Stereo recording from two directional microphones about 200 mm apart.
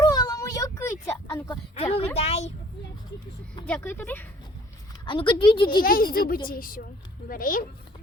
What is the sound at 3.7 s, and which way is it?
Speech, 10° left (ahead or behind).